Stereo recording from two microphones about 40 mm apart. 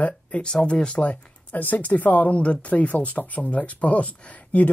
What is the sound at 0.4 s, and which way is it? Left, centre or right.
Speech, centre.